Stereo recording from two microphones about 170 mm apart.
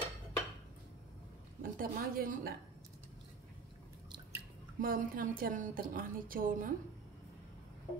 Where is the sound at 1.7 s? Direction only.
55° right (ahead or behind).